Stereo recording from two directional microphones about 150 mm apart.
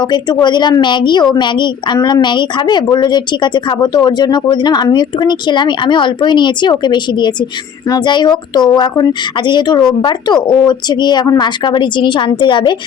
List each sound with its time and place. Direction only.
0.0 s a woman's voice: 30° left (ahead or behind)